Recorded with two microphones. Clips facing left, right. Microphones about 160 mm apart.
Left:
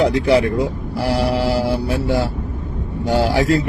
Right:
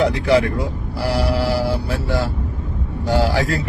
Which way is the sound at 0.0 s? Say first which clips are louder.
Left 2 dB; 20° left (ahead or behind).